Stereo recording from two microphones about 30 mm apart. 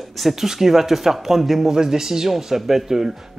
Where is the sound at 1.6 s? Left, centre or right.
Centre.